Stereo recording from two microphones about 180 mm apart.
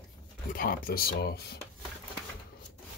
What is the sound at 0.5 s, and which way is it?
Speech, 55° left (ahead or behind).